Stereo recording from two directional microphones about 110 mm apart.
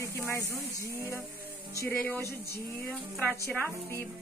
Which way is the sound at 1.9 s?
15° left (ahead or behind).